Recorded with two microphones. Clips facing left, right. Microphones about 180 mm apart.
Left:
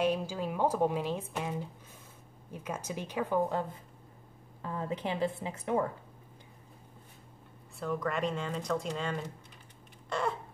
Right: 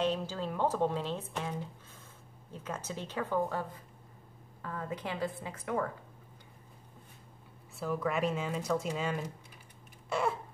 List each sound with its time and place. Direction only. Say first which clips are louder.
0.0 s a woman's voice: left 2 dB; 10° left (ahead or behind)
7.8 s speech: right 1 dB; 5° right (ahead or behind)
10.0 s a sound: right 1 dB; 10° right (ahead or behind)